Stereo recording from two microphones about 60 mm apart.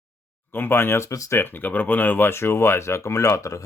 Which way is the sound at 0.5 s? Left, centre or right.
Left.